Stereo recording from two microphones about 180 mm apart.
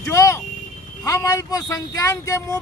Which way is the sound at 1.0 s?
15° left (ahead or behind).